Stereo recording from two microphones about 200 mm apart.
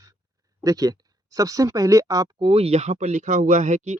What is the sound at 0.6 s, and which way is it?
Speech, 20° right (ahead or behind).